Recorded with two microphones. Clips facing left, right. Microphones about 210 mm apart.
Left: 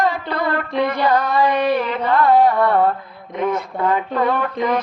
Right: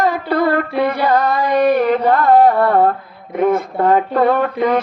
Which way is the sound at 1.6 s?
50° right (ahead or behind).